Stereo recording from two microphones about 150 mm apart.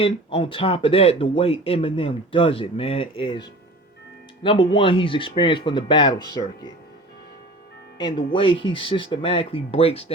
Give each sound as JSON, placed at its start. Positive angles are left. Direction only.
{"t": 0.0, "sound": "speech", "side_deg": 35}
{"t": 7.9, "sound": "speech", "side_deg": 30}